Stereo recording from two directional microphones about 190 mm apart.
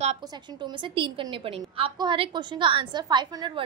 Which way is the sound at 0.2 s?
20° right (ahead or behind).